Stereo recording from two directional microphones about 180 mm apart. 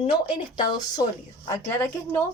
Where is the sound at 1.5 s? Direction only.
15° left (ahead or behind).